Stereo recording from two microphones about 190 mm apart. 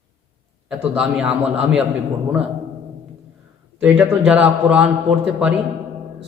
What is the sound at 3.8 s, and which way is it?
A man's voice, 5° right (ahead or behind).